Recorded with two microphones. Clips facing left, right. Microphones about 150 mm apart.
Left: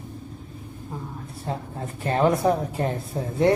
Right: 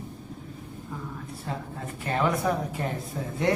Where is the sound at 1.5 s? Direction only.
30° left (ahead or behind).